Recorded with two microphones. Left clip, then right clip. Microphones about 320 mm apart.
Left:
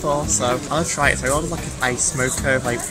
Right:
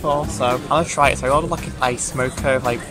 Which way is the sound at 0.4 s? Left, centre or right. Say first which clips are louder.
Right 3 dB; centre.